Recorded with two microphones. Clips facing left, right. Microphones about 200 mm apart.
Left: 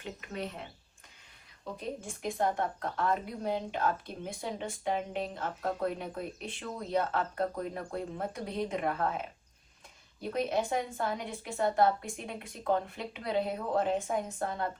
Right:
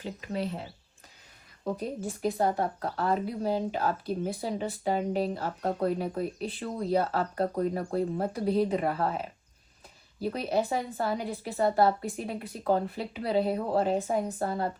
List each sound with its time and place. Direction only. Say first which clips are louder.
0.0 s a woman's voice: right 5 dB; 35° right (ahead or behind)
10.2 s speech: right 3 dB; 35° right (ahead or behind)